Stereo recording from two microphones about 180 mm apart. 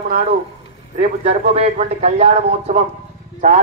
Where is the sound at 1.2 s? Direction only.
35° right (ahead or behind).